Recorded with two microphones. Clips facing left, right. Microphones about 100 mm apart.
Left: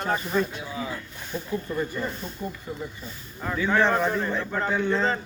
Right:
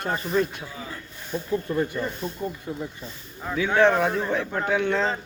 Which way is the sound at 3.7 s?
60° right (ahead or behind).